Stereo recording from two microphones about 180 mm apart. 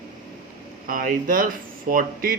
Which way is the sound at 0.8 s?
50° right (ahead or behind).